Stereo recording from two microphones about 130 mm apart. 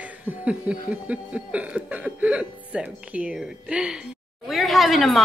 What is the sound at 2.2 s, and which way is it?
A woman's voice, 10° right (ahead or behind).